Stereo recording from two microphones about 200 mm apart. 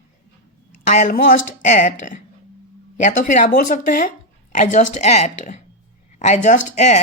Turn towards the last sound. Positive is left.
turn(degrees=35)  # may be behind; listen again after turning